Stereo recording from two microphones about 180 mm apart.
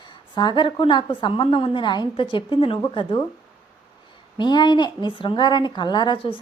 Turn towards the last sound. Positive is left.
turn(degrees=25)  # may be behind; listen again after turning